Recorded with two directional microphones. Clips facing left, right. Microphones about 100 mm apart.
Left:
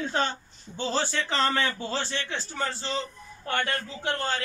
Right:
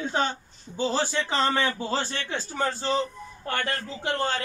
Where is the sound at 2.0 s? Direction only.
40° right (ahead or behind).